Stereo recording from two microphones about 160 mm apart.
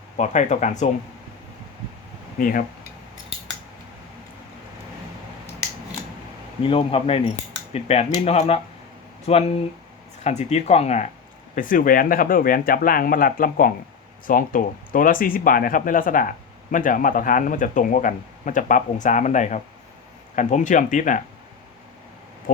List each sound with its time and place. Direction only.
0.2 s speech: 45° left (ahead or behind)
2.4 s speech: 60° left (ahead or behind)
6.6 s speech: 35° left (ahead or behind)
11.5 s speech: 60° left (ahead or behind)